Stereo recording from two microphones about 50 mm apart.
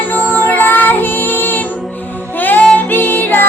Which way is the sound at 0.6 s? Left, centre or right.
Left.